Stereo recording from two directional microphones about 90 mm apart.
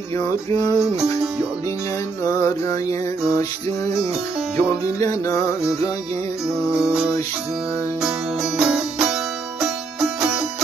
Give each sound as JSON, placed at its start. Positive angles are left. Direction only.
{"t": 0.5, "sound": "music", "side_deg": 40}
{"t": 2.2, "sound": "music", "side_deg": 35}
{"t": 4.6, "sound": "music", "side_deg": 35}
{"t": 6.8, "sound": "music", "side_deg": -5}
{"t": 8.5, "sound": "music", "side_deg": -5}